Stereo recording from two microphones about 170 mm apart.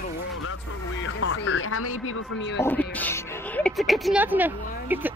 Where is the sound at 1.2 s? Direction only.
90° left.